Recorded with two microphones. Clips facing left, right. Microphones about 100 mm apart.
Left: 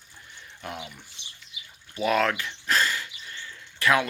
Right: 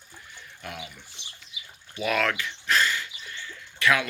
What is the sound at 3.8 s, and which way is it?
Speech, 35° left (ahead or behind).